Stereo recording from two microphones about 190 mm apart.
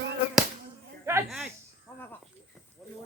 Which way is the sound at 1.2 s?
Centre (ahead or behind).